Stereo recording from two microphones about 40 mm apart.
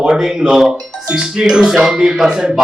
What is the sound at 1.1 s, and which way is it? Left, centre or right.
A man's voice, right.